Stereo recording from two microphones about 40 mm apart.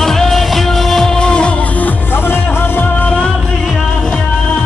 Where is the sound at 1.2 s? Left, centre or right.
Left.